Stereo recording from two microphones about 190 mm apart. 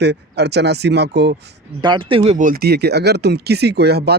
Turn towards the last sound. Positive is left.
turn(degrees=-60)  # may be behind; listen again after turning